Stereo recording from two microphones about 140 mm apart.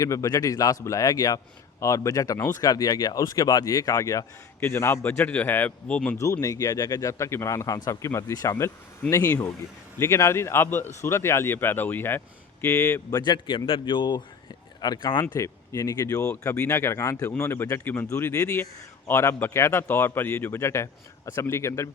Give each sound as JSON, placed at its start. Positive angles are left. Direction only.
{"t": 0.0, "sound": "speech", "side_deg": 25}
{"t": 6.1, "sound": "a man's voice", "side_deg": 20}